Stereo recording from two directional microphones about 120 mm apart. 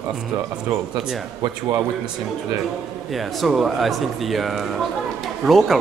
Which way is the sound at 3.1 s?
Centre (ahead or behind).